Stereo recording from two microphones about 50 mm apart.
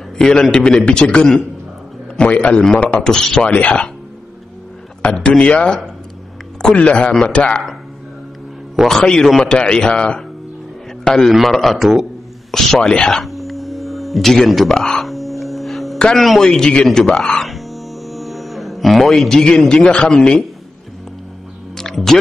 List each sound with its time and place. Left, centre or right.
0.2 s a man's voice: centre
2.2 s a man's voice: left
3.0 s a man's voice: centre
3.3 s a man's voice: left
5.0 s a man's voice: centre
8.8 s a man's voice: centre
11.2 s a man's voice: centre
13.2 s music: centre
16.2 s a man's voice: centre
17.2 s music: centre
19.3 s a man's voice: centre
21.7 s music: centre